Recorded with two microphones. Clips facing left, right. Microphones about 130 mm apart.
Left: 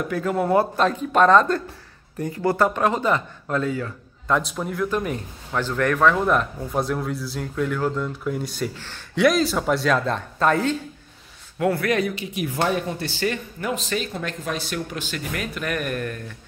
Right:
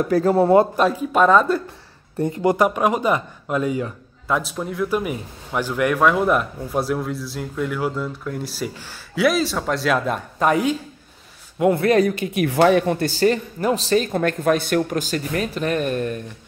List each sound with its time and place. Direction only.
0.0 s speech: 35° right (ahead or behind)
0.7 s speech: 10° right (ahead or behind)
2.1 s speech: 25° right (ahead or behind)
4.3 s a man's voice: centre (ahead or behind)
9.9 s speech: 10° right (ahead or behind)
11.9 s speech: 40° right (ahead or behind)
12.4 s speech: 80° right
12.9 s speech: 45° right (ahead or behind); by 16.2 s 25° right (ahead or behind)